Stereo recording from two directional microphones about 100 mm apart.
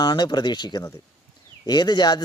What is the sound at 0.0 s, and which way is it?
Speech, 50° left (ahead or behind).